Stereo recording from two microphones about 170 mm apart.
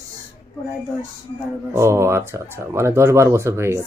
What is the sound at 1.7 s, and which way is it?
Speech, 15° right (ahead or behind).